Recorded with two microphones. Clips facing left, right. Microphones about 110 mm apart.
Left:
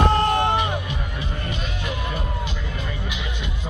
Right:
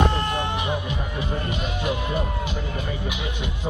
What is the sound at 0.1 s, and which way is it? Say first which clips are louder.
Music: left 6 dB; 65° left (ahead or behind).